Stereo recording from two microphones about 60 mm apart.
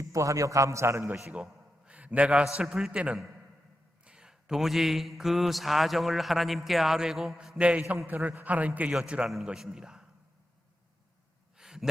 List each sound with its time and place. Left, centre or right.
0.0 s a man's voice: right
1.3 s a sound: centre
2.6 s a man's voice: centre
2.9 s a man's voice: centre
7.6 s a man's voice: centre
9.2 s a man's voice: centre
11.5 s a sound: centre